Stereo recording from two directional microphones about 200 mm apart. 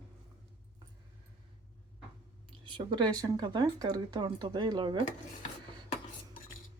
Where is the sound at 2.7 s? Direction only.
25° right (ahead or behind).